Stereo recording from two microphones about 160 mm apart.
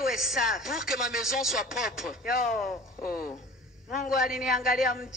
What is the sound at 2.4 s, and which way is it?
Speech, 60° left (ahead or behind).